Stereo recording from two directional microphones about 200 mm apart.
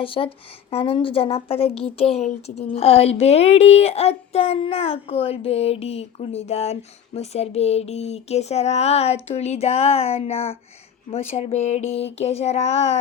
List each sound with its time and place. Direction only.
0.0 s a woman's voice: 25° left (ahead or behind)